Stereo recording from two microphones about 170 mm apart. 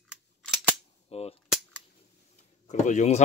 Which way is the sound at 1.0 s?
35° left (ahead or behind).